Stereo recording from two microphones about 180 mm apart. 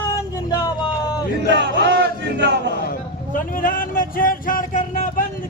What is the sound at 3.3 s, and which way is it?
Speech, 50° left (ahead or behind).